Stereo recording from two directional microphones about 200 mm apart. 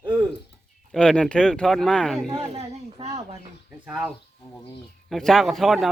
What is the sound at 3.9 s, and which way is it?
Speech, 5° right (ahead or behind).